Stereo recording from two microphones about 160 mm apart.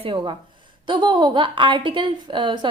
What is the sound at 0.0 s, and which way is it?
A woman's voice, 30° right (ahead or behind).